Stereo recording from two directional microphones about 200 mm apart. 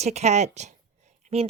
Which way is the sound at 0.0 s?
35° right (ahead or behind).